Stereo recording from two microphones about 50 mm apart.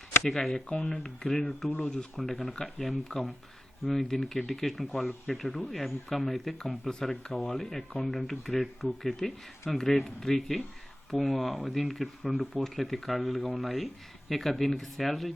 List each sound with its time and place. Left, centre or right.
0.2 s speech: centre
1.8 s speech: centre
2.1 s speech: centre